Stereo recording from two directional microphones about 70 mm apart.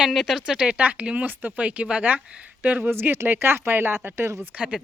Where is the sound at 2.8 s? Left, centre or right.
Right.